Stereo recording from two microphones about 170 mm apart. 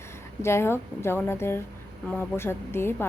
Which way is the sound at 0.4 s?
15° left (ahead or behind).